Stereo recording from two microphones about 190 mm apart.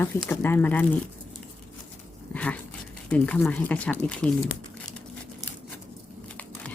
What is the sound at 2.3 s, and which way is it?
Dog, 5° left (ahead or behind).